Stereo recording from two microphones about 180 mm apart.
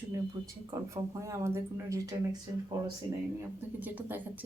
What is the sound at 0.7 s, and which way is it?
Speech, 20° right (ahead or behind).